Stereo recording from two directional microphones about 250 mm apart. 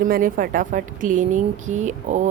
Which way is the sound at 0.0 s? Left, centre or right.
Right.